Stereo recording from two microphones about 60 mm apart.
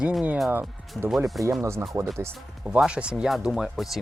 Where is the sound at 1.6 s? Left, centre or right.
Right.